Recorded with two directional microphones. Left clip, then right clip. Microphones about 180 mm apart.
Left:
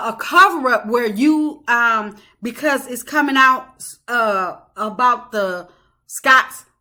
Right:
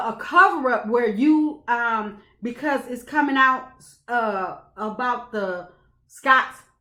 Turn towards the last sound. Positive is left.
turn(degrees=10)  # may be behind; listen again after turning